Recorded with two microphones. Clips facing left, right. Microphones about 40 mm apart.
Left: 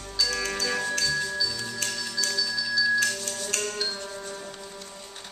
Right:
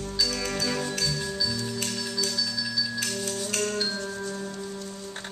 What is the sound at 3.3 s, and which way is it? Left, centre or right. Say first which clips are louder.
Music: right 2 dB; centre.